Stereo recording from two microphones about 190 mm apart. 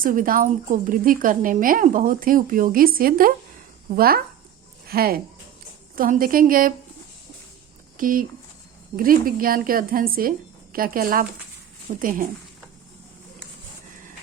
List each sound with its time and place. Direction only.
0.0 s a woman's voice: 45° right (ahead or behind)
7.9 s a woman's voice: 45° right (ahead or behind)